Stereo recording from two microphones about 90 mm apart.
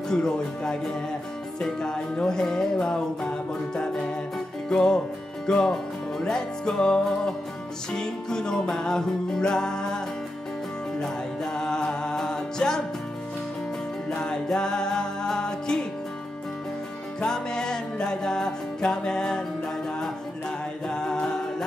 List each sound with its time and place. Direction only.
0.1 s music: 10° left (ahead or behind)
14.1 s music: 10° left (ahead or behind)
17.2 s music: 10° left (ahead or behind)